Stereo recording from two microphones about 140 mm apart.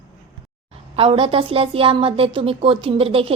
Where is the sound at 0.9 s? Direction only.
40° right (ahead or behind).